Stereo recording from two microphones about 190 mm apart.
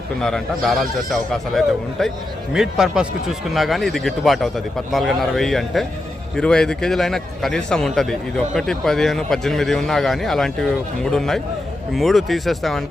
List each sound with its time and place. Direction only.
0.2 s speech: centre (ahead or behind)